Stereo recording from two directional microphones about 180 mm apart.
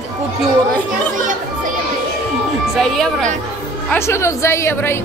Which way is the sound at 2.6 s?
Centre (ahead or behind).